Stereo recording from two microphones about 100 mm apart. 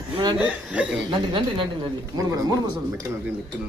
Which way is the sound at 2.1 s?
35° right (ahead or behind).